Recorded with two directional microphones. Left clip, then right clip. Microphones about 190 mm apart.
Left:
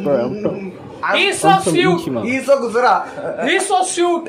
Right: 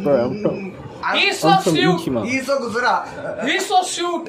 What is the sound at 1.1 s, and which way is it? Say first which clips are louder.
Speech: left 2 dB; 15° left (ahead or behind).